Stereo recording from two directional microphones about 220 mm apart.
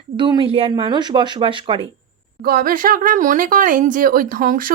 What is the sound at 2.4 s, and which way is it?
Speech, 40° right (ahead or behind).